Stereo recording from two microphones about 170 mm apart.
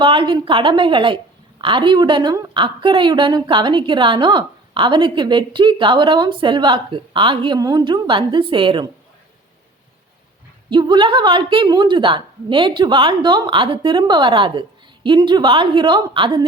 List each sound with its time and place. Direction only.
0.0 s a woman's voice: 30° right (ahead or behind)
10.7 s a woman's voice: 25° right (ahead or behind)